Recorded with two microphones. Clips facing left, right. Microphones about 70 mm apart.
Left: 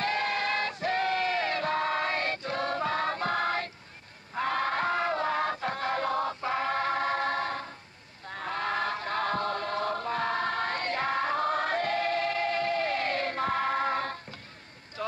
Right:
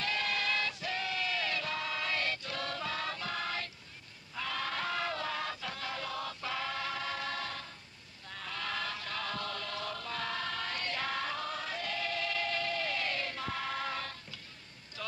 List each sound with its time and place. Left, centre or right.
0.0 s music: left
8.3 s choir: left
15.0 s a sound: left